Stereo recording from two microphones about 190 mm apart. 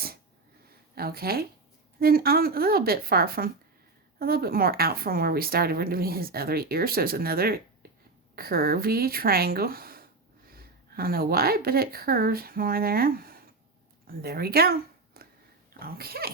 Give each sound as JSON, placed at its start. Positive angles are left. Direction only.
{"t": 0.9, "sound": "a woman's voice", "side_deg": -55}